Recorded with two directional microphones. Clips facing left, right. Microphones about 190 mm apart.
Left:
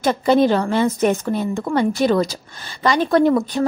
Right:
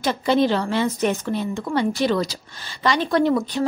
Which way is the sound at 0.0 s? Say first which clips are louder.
Left 4 dB; 50° left (ahead or behind).